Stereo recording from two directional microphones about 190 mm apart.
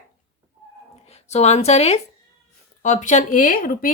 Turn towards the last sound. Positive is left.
turn(degrees=45)  # may be behind; listen again after turning